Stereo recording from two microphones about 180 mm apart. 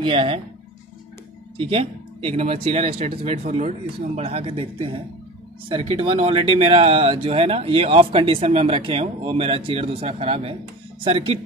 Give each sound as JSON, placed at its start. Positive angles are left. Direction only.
{"t": 0.0, "sound": "speech", "side_deg": -30}
{"t": 1.6, "sound": "speech", "side_deg": -30}